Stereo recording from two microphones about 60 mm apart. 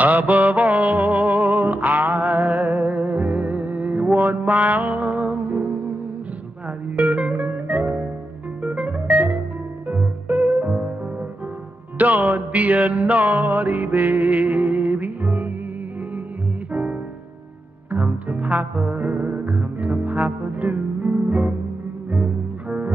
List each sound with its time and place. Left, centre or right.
0.0 s music: right
7.0 s music: right
12.0 s music: right
17.9 s music: right
21.0 s music: centre
22.1 s cello: right